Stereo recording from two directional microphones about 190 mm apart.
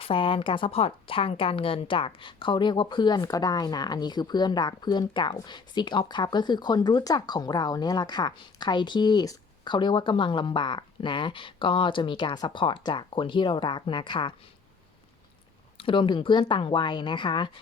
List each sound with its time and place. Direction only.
0.0 s a woman's voice: 30° left (ahead or behind)
15.8 s a woman's voice: 25° left (ahead or behind)